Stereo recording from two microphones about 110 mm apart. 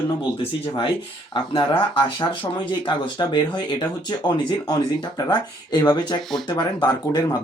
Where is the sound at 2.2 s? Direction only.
40° left (ahead or behind).